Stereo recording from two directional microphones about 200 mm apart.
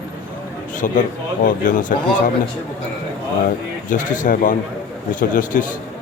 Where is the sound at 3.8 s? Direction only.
40° left (ahead or behind).